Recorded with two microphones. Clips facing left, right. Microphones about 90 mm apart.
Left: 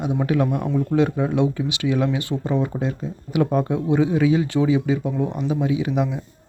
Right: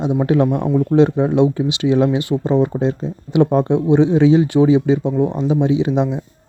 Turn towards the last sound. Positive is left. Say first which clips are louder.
# right 5 dB
turn(degrees=-25)  # may be behind; listen again after turning